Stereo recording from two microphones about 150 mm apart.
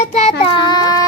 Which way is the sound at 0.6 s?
30° left (ahead or behind).